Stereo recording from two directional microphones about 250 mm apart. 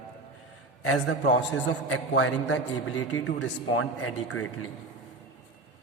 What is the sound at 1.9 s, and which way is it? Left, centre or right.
Speech, left.